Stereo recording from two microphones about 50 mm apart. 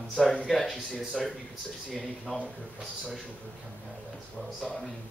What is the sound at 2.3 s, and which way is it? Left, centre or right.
Speech, left.